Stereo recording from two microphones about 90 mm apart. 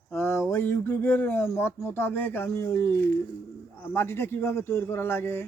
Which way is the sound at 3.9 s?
25° left (ahead or behind).